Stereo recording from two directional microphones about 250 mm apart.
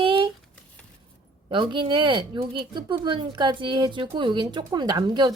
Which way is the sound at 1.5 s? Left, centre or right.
Centre.